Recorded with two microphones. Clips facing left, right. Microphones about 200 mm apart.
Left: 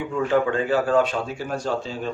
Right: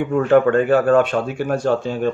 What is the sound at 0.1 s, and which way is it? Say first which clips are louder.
A man's voice: right 7 dB; 55° right (ahead or behind).